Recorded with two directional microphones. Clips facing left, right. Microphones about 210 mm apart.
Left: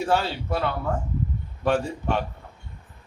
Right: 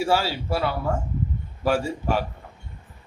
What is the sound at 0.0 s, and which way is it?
A man's voice, 10° right (ahead or behind).